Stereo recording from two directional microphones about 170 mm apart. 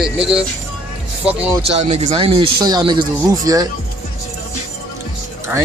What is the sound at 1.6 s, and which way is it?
Speech, 35° right (ahead or behind).